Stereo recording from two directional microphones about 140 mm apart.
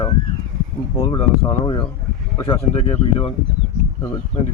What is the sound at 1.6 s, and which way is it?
Speech, 30° left (ahead or behind).